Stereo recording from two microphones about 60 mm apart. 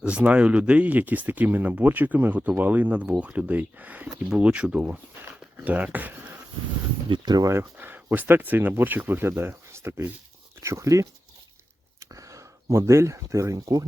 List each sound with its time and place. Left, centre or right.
0.0 s speech: right
7.5 s speech: right
10.6 s speech: right